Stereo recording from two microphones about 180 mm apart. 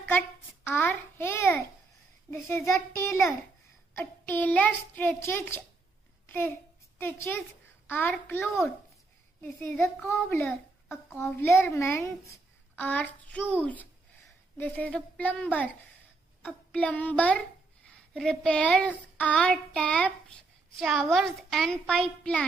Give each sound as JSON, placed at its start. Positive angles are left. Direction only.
{"t": 0.7, "sound": "a sound", "side_deg": 10}
{"t": 2.3, "sound": "a child's voice", "side_deg": 15}
{"t": 6.2, "sound": "a sound", "side_deg": 10}
{"t": 7.0, "sound": "a child's voice", "side_deg": 10}
{"t": 10.4, "sound": "a child's voice", "side_deg": 0}
{"t": 11.1, "sound": "a child's voice", "side_deg": 15}